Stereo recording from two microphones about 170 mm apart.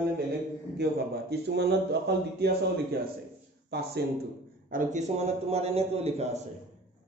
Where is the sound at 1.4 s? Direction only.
80° right.